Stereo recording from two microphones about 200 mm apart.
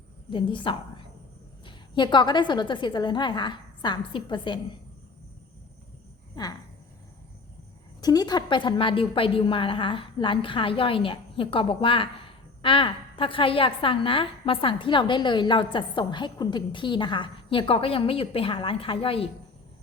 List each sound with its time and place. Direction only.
0.3 s a woman's voice: 25° left (ahead or behind)
6.3 s speech: 20° left (ahead or behind)
8.0 s a woman's voice: 20° left (ahead or behind)